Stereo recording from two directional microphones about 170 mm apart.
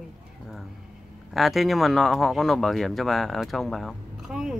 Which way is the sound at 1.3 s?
Centre (ahead or behind).